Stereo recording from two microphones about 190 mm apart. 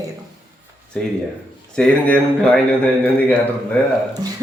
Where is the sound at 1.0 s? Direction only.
5° left (ahead or behind).